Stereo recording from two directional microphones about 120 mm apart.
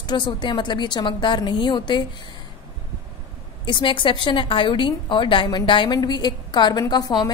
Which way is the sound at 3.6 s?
45° left (ahead or behind).